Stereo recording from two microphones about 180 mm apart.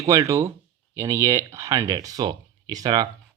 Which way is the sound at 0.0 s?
15° right (ahead or behind).